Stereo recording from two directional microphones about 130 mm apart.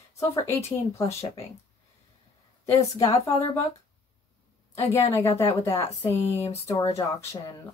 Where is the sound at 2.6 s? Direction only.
25° left (ahead or behind).